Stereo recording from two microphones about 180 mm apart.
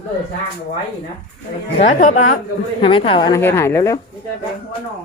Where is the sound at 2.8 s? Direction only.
30° left (ahead or behind).